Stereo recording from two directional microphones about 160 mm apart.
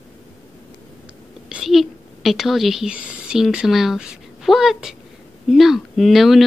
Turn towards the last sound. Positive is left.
turn(degrees=0)  # may be behind; listen again after turning